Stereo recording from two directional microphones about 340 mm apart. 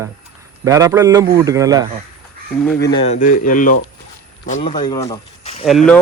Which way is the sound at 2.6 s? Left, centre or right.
Centre.